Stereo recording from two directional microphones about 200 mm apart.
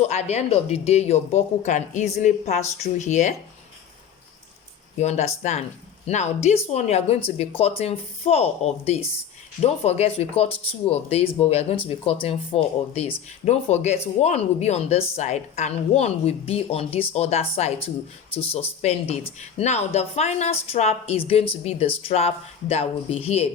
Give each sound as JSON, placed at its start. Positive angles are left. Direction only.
{"t": 0.0, "sound": "speech", "side_deg": 35}
{"t": 4.9, "sound": "speech", "side_deg": 35}